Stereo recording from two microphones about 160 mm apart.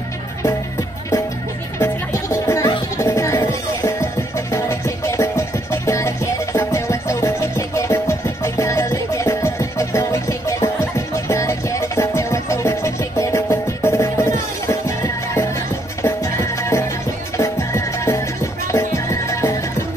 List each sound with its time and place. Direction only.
1.8 s music: 15° left (ahead or behind)